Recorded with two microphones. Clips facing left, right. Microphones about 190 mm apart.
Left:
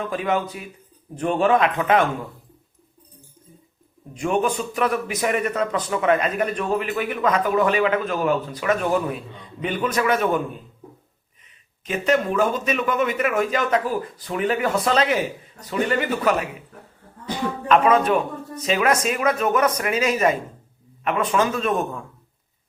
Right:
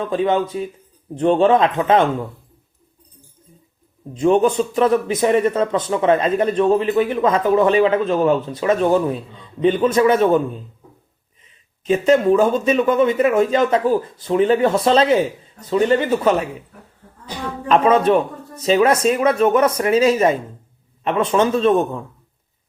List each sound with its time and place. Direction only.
0.1 s a man's voice: 25° right (ahead or behind)
4.1 s a man's voice: 25° right (ahead or behind)
11.9 s a man's voice: 30° right (ahead or behind)
17.7 s a man's voice: 30° right (ahead or behind)